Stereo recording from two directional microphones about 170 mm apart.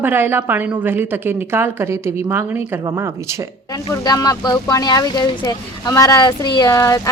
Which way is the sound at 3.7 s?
25° left (ahead or behind).